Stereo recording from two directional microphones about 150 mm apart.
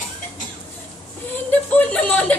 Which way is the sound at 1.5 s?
10° left (ahead or behind).